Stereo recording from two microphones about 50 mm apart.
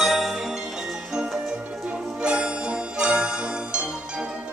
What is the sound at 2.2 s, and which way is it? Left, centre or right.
Music, centre.